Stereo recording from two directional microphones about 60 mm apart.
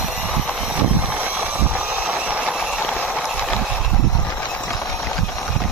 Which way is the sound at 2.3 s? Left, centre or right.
Right.